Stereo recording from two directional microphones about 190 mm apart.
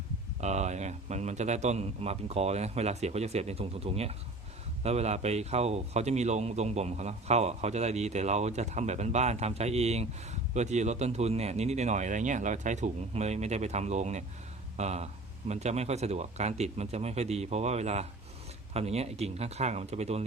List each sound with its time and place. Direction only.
0.4 s a man's voice: 35° right (ahead or behind)